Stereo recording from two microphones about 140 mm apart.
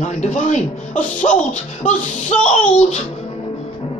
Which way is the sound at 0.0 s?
55° left (ahead or behind).